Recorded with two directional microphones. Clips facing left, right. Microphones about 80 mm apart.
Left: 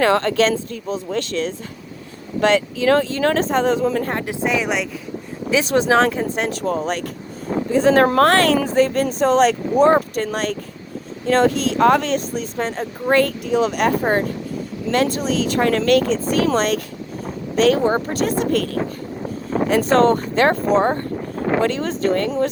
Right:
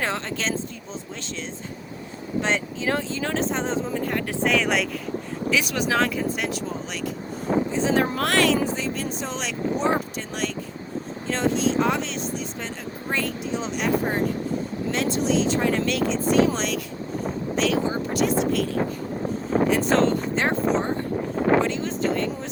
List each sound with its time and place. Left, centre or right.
0.0 s speech: left
2.4 s speech: left
3.1 s speech: left
4.4 s speech: centre
5.5 s speech: left
7.7 s speech: left
8.3 s speech: left
13.1 s speech: left
16.0 s speech: left
21.6 s speech: left